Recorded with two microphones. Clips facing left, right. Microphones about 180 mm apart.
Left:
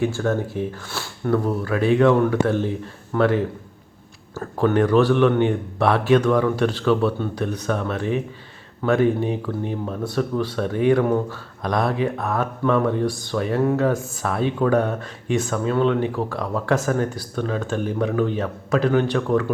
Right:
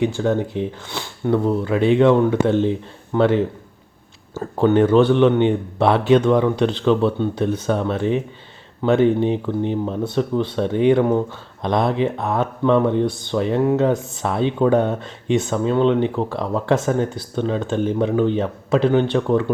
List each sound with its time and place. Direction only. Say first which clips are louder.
0.0 s speech: right 3 dB; 20° right (ahead or behind)